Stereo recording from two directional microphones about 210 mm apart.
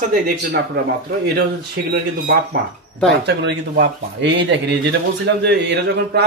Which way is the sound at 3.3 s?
55° right (ahead or behind).